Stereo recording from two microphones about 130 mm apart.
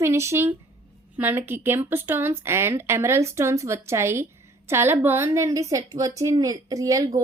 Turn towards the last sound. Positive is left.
turn(degrees=-25)  # may be behind; listen again after turning